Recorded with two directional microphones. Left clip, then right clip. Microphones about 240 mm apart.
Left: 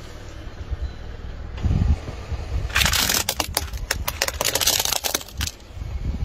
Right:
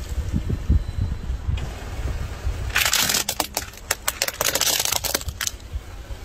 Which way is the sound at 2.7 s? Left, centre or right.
Centre.